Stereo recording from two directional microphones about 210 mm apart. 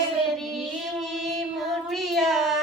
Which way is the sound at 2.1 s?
Centre (ahead or behind).